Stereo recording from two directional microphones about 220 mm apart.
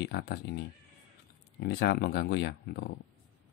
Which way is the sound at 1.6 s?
50° left (ahead or behind).